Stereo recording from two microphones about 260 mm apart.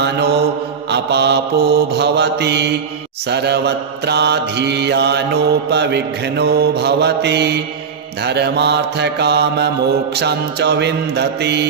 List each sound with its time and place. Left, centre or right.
0.0 s mantra: right